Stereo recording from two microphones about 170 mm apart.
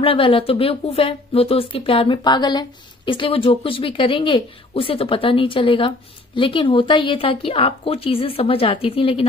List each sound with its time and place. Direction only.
0.0 s a woman's voice: 35° left (ahead or behind)